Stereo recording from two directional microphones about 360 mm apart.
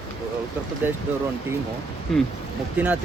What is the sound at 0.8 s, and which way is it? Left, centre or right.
Speech, centre.